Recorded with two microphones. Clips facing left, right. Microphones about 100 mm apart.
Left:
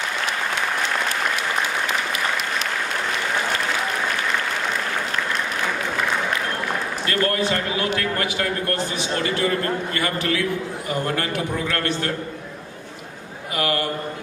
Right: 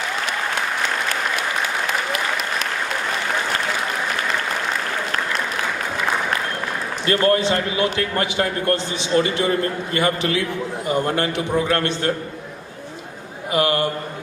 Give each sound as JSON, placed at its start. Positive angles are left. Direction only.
{"t": 7.1, "sound": "speech", "side_deg": -25}
{"t": 13.5, "sound": "a man's voice", "side_deg": -25}